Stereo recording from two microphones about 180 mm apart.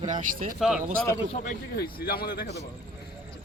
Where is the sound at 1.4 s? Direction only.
60° left (ahead or behind).